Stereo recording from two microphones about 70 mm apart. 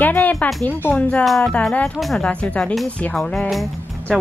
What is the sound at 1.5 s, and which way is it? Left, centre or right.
Speech, centre.